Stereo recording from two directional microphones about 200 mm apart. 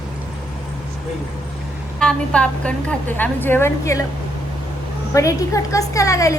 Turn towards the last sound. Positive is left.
turn(degrees=15)  # may be behind; listen again after turning